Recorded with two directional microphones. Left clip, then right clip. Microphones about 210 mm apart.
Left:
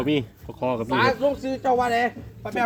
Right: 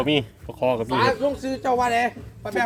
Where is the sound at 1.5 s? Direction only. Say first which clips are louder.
Right 2 dB; 10° left (ahead or behind).